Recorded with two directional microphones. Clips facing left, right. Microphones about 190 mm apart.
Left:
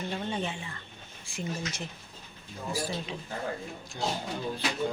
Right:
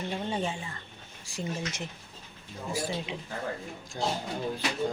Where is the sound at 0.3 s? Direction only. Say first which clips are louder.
Right 2 dB; 25° right (ahead or behind).